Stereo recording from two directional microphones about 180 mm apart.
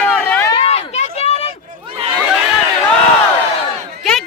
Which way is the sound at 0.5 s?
35° left (ahead or behind).